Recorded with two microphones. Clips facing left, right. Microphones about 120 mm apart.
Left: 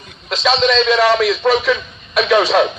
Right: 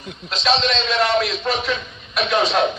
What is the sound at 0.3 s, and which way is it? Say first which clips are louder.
A man's voice: left 5 dB; 80° left.